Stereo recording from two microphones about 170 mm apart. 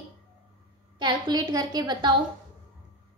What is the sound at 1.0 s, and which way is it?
Speech, 25° right (ahead or behind).